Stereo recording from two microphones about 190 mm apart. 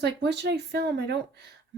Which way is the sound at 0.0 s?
65° right (ahead or behind).